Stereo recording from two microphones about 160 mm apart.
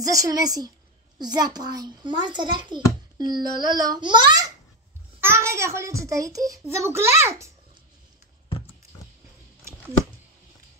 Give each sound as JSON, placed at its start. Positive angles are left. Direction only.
{"t": 0.0, "sound": "a child's voice", "side_deg": -20}